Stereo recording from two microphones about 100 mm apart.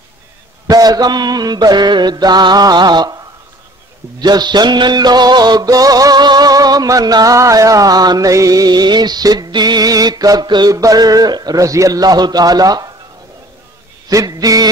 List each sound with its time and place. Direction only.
0.7 s mantra: 40° right (ahead or behind)
4.2 s music: 45° right (ahead or behind)
10.7 s music: 35° right (ahead or behind)
14.0 s music: 40° right (ahead or behind)